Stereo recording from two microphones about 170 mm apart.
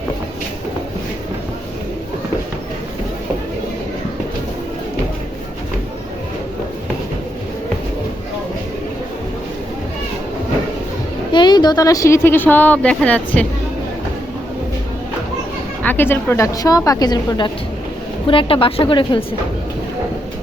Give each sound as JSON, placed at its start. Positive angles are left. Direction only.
{"t": 11.3, "sound": "a woman's voice", "side_deg": 25}
{"t": 15.8, "sound": "a woman's voice", "side_deg": 10}